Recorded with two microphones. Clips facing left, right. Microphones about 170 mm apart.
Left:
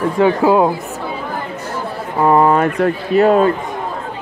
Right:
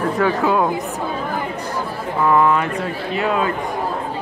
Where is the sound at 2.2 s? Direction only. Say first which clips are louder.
Left 4 dB; 35° left (ahead or behind).